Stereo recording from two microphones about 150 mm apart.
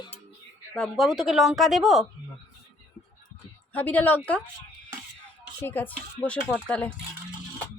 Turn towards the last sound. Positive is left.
turn(degrees=10)  # may be behind; listen again after turning